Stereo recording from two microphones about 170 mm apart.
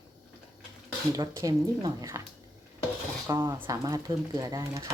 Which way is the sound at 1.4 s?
20° right (ahead or behind).